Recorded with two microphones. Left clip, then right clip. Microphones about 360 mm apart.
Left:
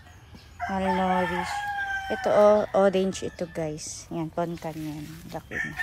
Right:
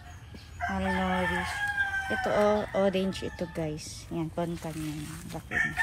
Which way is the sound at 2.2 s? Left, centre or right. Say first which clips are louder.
Left 8 dB; centre.